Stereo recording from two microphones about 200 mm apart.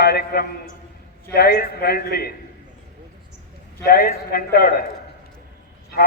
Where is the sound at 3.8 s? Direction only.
50° left (ahead or behind).